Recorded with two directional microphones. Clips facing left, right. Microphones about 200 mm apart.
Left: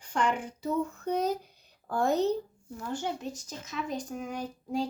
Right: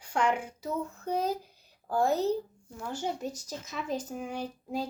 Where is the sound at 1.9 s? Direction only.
35° right (ahead or behind).